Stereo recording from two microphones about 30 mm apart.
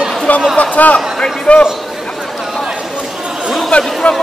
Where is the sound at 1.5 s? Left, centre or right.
Left.